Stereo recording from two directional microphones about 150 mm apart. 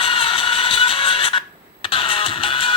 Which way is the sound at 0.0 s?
35° left (ahead or behind).